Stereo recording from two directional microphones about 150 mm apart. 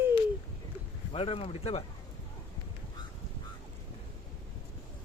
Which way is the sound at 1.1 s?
40° left (ahead or behind).